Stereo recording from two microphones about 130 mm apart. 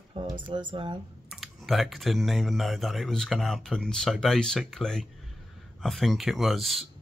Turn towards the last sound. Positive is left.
turn(degrees=0)  # may be behind; listen again after turning